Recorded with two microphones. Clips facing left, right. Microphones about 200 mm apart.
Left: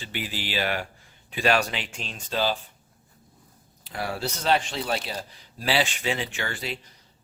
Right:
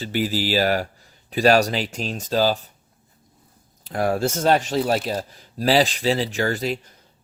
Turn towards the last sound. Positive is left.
turn(degrees=-40)  # may be behind; listen again after turning